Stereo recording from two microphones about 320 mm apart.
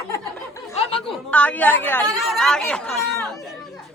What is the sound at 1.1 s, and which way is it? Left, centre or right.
Speech, centre.